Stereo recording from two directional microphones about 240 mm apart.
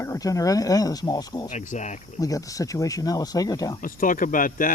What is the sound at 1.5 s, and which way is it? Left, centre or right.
Speech, left.